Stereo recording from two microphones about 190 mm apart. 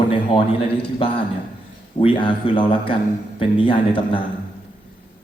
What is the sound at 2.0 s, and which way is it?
A man's voice, 25° left (ahead or behind).